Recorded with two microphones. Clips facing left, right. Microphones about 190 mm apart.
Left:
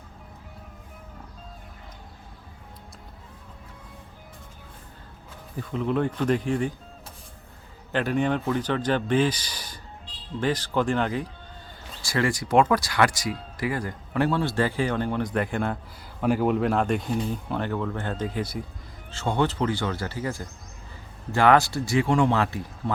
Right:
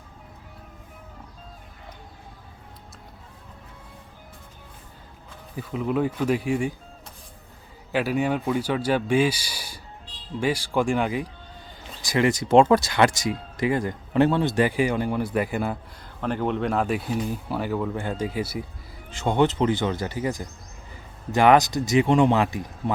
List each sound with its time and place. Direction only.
5.5 s speech: 5° right (ahead or behind)
7.9 s speech: 5° right (ahead or behind)
16.2 s speech: 5° left (ahead or behind)
19.1 s speech: 15° right (ahead or behind)